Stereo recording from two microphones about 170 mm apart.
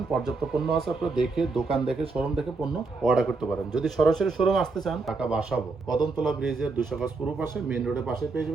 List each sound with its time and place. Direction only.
0.1 s speech: centre (ahead or behind)
5.9 s speech: 25° left (ahead or behind)
6.2 s speech: centre (ahead or behind)